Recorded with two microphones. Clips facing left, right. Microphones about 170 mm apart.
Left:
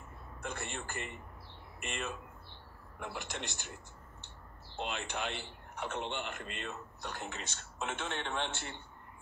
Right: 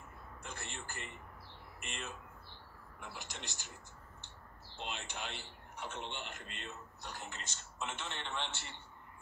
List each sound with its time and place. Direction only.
0.4 s a man's voice: 60° left (ahead or behind)
4.7 s a man's voice: 60° left (ahead or behind)